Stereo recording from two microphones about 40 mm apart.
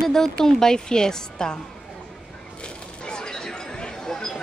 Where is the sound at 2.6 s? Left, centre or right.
Left.